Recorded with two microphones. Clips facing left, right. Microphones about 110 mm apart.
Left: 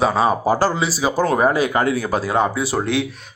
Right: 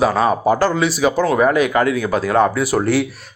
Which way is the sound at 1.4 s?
30° left (ahead or behind).